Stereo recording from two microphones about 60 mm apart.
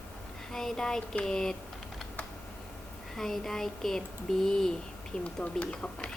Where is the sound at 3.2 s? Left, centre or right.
Centre.